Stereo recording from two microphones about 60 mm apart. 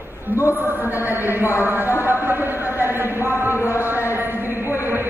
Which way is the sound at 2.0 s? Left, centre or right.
Right.